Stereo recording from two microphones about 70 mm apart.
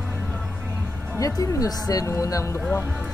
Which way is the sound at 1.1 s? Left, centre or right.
Left.